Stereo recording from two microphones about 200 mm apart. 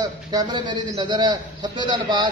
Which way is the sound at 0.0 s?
20° right (ahead or behind).